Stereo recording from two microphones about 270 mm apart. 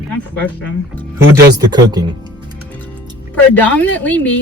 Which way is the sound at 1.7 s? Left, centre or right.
Centre.